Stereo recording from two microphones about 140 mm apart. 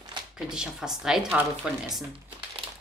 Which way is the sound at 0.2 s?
35° right (ahead or behind).